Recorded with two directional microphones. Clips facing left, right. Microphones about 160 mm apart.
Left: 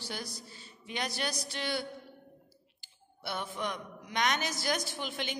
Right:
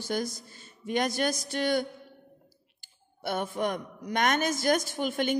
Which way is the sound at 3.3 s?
50° right (ahead or behind).